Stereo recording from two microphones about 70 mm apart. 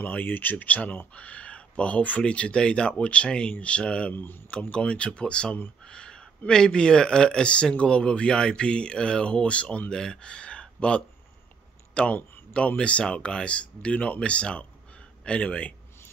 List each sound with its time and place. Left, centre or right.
0.0 s speech: left
4.1 s speech: left
4.5 s speech: centre
12.2 s a sound: left
12.5 s speech: centre